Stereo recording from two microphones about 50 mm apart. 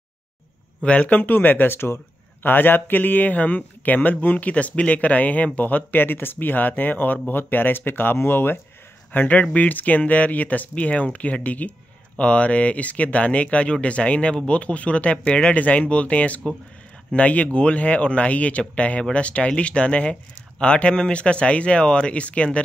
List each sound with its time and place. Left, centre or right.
0.8 s a man's voice: left
2.4 s a man's voice: left
9.4 s a man's voice: left